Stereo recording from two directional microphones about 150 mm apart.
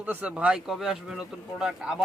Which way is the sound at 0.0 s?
10° right (ahead or behind).